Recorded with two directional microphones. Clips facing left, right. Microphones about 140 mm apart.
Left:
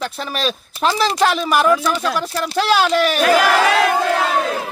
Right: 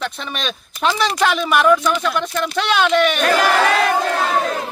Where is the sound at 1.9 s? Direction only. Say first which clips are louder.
Even; 35° left (ahead or behind).